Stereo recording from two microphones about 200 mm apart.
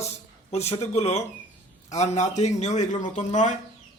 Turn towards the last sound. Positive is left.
turn(degrees=35)  # may be behind; listen again after turning